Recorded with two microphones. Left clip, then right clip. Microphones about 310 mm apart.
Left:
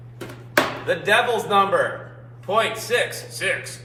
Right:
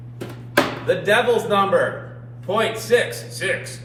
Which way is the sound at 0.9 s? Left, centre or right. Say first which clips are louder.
Right 3 dB; centre.